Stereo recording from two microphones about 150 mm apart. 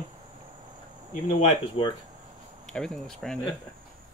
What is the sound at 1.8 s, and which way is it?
Speech, 40° left (ahead or behind).